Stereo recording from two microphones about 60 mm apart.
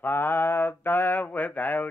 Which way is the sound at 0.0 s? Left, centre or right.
Left.